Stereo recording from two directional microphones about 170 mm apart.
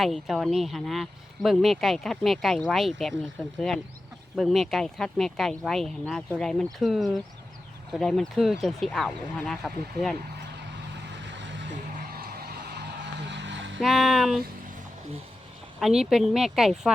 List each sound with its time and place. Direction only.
0.0 s speech: centre (ahead or behind)
10.9 s vehicle: 90° right
12.1 s music: 65° right (ahead or behind)
13.2 s a sound: 90° right
13.8 s speech: centre (ahead or behind)
15.8 s speech: 5° right (ahead or behind)